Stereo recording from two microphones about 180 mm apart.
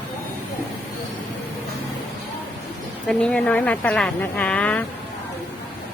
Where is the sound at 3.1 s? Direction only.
5° left (ahead or behind).